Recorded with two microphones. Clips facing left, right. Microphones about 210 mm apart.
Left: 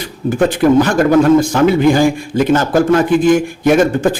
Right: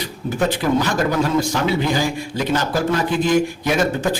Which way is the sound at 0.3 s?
50° left (ahead or behind).